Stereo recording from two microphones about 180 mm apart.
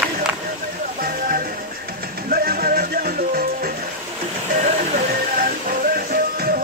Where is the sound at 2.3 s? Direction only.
55° right (ahead or behind).